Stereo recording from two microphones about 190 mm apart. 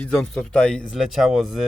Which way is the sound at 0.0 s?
5° left (ahead or behind).